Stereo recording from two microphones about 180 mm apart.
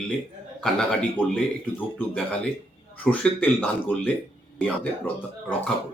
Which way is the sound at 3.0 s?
5° left (ahead or behind).